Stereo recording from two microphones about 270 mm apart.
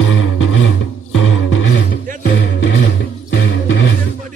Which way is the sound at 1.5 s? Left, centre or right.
Left.